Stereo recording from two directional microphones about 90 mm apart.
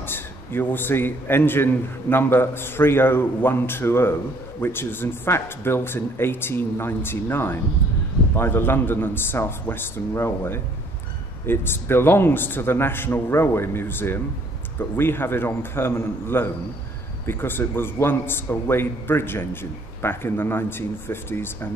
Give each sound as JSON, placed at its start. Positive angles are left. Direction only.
{"t": 0.0, "sound": "a man's voice", "side_deg": 25}